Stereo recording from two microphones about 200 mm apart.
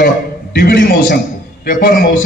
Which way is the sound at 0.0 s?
50° left (ahead or behind).